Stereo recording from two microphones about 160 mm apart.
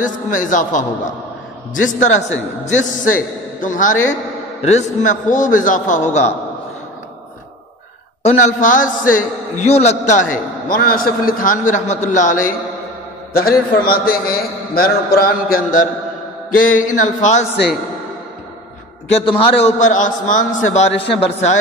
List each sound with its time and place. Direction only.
0.0 s a man's voice: 55° left (ahead or behind)
8.2 s speech: 40° left (ahead or behind)
8.5 s a man's voice: 55° left (ahead or behind)
9.1 s a man's voice: 45° left (ahead or behind)
13.3 s a man's voice: 70° left (ahead or behind); by 17.5 s 50° left (ahead or behind)
19.0 s a man's voice: 35° left (ahead or behind)
19.6 s a man's voice: 50° left (ahead or behind)